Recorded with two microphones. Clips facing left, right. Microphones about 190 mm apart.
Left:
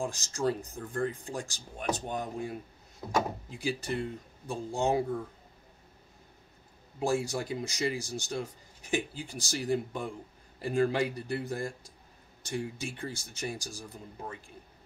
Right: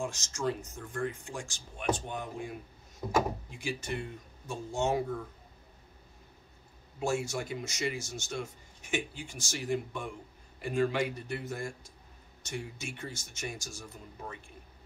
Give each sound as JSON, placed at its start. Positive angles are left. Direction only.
{"t": 0.0, "sound": "speech", "side_deg": 35}
{"t": 3.0, "sound": "speech", "side_deg": 0}
{"t": 3.4, "sound": "speech", "side_deg": 35}
{"t": 7.0, "sound": "speech", "side_deg": 35}